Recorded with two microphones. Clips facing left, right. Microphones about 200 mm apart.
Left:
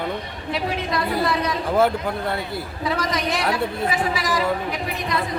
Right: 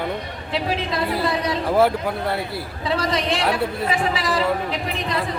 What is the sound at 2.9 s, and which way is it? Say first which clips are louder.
Speech: right 2 dB; 30° right (ahead or behind).